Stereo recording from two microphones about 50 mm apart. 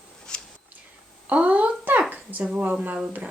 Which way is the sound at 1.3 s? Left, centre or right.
Right.